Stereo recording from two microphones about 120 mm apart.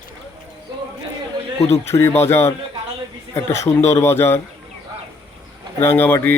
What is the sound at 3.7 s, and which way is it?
Speech, 25° left (ahead or behind).